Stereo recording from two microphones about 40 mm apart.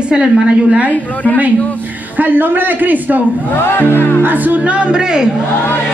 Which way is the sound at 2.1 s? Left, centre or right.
Right.